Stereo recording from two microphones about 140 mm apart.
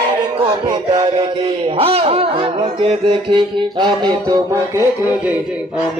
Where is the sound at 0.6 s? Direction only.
35° right (ahead or behind).